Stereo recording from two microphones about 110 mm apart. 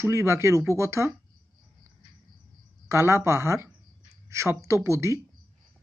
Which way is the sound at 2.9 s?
25° right (ahead or behind).